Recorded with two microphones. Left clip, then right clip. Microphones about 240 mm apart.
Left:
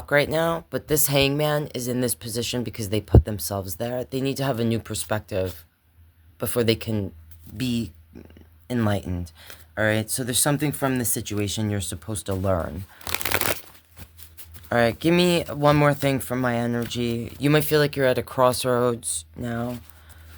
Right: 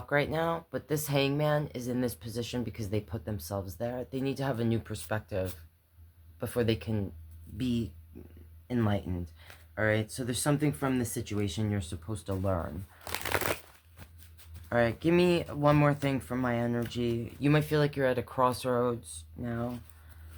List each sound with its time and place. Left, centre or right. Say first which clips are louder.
0.1 s speech: left 8 dB; left
13.1 s a sound: left 6 dB; left
14.7 s speech: left 7 dB; left